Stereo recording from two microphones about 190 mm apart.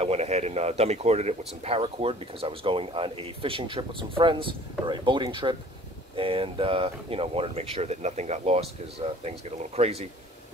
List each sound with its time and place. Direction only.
0.0 s speech: 35° right (ahead or behind)